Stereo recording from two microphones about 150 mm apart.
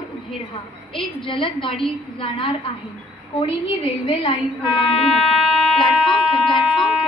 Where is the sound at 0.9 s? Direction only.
35° left (ahead or behind).